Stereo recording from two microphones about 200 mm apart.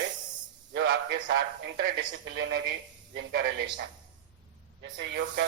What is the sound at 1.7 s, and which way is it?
A man's voice, 55° right (ahead or behind).